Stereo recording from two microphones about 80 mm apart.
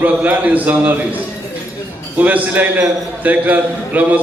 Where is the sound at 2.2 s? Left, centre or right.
Right.